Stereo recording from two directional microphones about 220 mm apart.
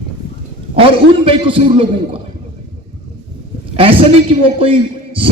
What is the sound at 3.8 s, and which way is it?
Speech, 25° right (ahead or behind).